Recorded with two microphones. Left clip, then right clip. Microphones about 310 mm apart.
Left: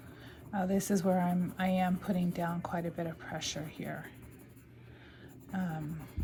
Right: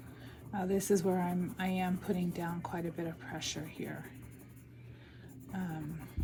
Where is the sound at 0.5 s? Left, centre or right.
Left.